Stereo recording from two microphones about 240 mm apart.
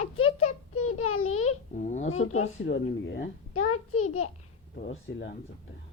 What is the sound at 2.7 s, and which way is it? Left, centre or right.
A child's voice, left.